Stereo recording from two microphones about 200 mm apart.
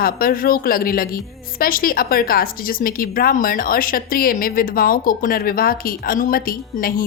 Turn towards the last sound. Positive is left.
turn(degrees=45)  # may be behind; listen again after turning